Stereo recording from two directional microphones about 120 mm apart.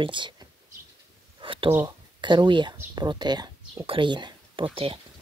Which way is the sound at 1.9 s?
40° right (ahead or behind).